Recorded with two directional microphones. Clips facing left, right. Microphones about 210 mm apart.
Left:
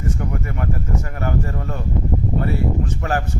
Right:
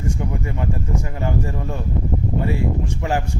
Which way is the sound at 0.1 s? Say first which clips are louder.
Even; 15° right (ahead or behind).